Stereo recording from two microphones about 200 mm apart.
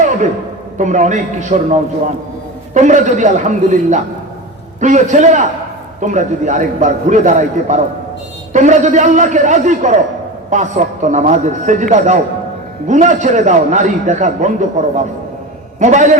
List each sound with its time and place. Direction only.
0.8 s a man's voice: 35° right (ahead or behind)